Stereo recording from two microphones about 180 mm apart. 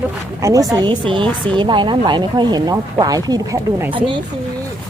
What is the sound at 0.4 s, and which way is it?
Speech, 20° right (ahead or behind).